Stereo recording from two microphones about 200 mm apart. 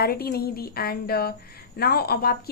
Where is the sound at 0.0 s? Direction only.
50° left (ahead or behind).